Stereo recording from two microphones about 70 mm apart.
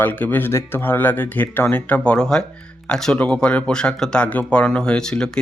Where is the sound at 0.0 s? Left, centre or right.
Left.